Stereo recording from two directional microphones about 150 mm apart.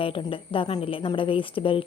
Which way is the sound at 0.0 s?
35° left (ahead or behind).